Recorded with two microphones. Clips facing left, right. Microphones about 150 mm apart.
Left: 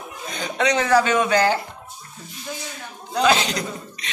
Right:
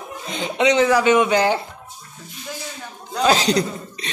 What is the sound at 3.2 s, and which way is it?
Speech, 35° right (ahead or behind).